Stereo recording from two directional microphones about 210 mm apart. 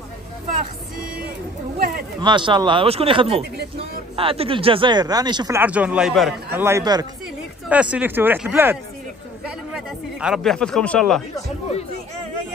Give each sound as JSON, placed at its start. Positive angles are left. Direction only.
{"t": 0.5, "sound": "music", "side_deg": -45}
{"t": 2.2, "sound": "speech", "side_deg": -20}
{"t": 5.6, "sound": "a man's voice", "side_deg": -5}
{"t": 6.6, "sound": "speech", "side_deg": -15}
{"t": 7.7, "sound": "speech", "side_deg": -5}
{"t": 9.8, "sound": "speech", "side_deg": 0}